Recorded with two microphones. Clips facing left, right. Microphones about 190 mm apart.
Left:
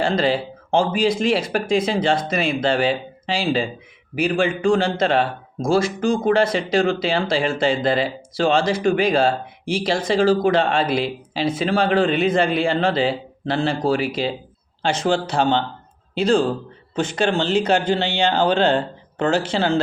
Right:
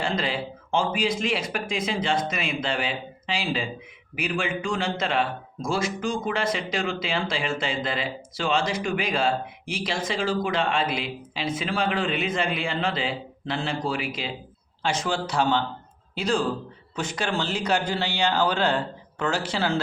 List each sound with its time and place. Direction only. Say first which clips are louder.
0.0 s a man's voice: left 8 dB; 30° left (ahead or behind)